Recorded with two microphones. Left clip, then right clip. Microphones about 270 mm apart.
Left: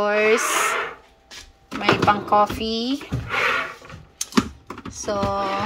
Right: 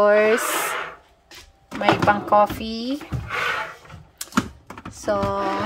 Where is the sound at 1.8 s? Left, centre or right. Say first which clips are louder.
Even; right.